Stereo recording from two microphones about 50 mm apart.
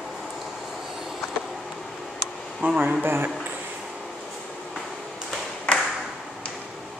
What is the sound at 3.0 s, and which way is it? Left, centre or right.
Speech, right.